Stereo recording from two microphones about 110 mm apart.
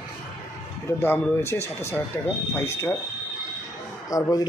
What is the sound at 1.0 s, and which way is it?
Speech, 20° left (ahead or behind).